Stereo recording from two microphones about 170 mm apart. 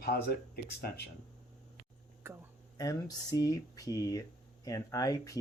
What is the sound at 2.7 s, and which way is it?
Speech, 20° left (ahead or behind).